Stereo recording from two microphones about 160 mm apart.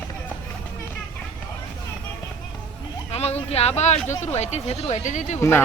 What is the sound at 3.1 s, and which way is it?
Speech, 40° left (ahead or behind).